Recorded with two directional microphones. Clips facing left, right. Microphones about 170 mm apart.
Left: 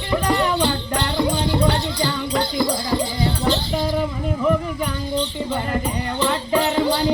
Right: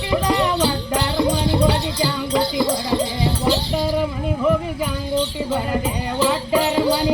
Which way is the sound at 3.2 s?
5° right (ahead or behind).